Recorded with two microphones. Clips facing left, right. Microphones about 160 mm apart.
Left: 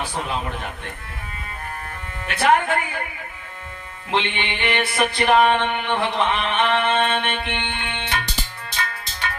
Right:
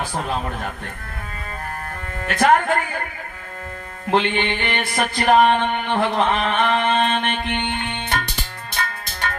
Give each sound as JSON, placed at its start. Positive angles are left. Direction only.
{"t": 2.2, "sound": "mantra", "side_deg": -40}
{"t": 4.1, "sound": "mantra", "side_deg": -40}
{"t": 8.8, "sound": "music", "side_deg": -45}